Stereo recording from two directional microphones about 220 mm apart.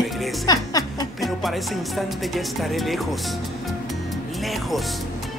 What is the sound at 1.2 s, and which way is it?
Speech, centre (ahead or behind).